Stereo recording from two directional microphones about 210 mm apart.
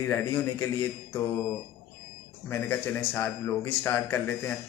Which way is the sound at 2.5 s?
10° left (ahead or behind).